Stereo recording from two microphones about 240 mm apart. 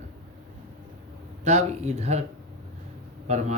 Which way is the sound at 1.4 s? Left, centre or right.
Right.